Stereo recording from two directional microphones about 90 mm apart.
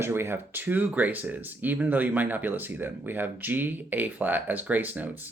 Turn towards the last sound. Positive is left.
turn(degrees=-20)  # may be behind; listen again after turning